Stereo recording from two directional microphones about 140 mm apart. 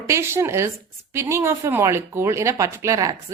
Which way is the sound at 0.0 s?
20° right (ahead or behind).